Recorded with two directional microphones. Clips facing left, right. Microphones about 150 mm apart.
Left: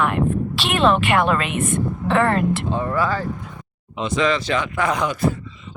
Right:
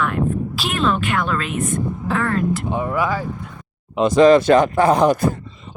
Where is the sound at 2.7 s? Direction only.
15° right (ahead or behind).